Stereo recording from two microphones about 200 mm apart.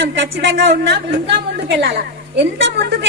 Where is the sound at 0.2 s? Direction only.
65° right (ahead or behind).